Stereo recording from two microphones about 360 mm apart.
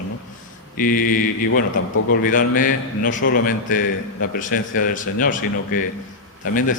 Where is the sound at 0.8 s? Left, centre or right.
Left.